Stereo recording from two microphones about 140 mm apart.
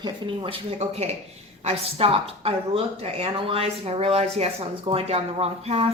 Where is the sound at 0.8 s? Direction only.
50° right (ahead or behind).